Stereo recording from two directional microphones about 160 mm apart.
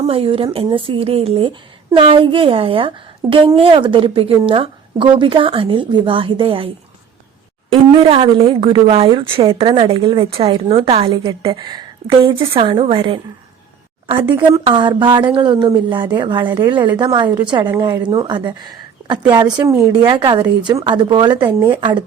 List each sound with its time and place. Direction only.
0.0 s a woman's voice: 35° right (ahead or behind)
7.9 s a woman's voice: 30° right (ahead or behind)